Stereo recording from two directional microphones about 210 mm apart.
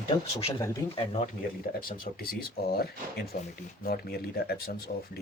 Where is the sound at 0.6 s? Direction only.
25° left (ahead or behind).